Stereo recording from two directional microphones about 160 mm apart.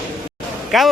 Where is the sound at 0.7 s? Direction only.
Centre (ahead or behind).